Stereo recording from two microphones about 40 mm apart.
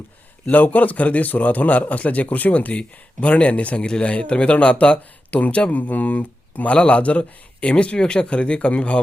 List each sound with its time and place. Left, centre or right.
0.5 s a man's voice: left
3.8 s a man's voice: left